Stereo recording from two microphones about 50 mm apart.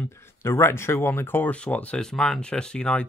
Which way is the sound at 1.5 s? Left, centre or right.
Left.